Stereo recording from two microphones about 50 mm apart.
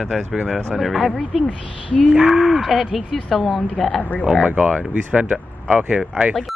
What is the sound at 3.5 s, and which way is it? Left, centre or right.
Speech, left.